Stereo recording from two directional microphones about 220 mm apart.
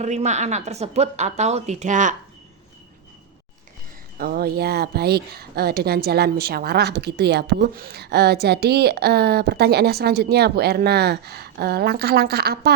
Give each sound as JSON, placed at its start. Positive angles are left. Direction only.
{"t": 0.0, "sound": "a woman's voice", "side_deg": -30}
{"t": 4.2, "sound": "speech", "side_deg": -45}